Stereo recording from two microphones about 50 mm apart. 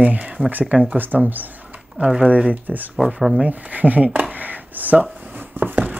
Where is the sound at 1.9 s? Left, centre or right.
Centre.